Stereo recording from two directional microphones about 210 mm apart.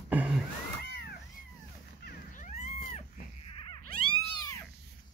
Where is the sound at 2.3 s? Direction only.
35° left (ahead or behind).